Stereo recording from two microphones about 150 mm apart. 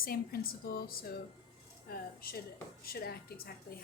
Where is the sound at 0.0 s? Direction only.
75° left (ahead or behind).